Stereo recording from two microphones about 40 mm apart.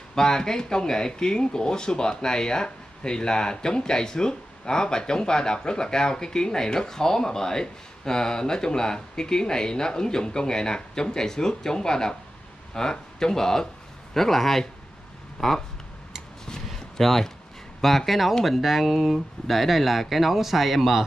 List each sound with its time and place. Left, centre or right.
0.1 s speech: centre
16.6 s a sound: centre
17.7 s speech: centre